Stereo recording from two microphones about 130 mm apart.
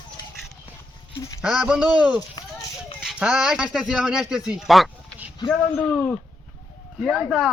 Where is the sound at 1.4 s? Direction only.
5° right (ahead or behind).